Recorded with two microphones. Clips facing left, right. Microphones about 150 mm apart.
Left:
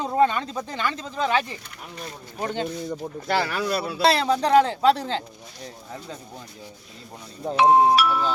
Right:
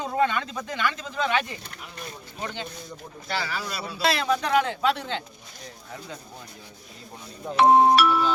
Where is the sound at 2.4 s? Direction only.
45° left (ahead or behind).